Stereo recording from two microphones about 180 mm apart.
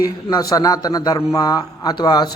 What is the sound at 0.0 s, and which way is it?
A man's voice, 20° left (ahead or behind).